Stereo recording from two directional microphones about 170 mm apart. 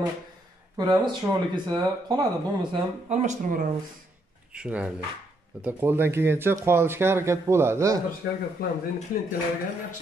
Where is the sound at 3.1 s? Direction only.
45° right (ahead or behind).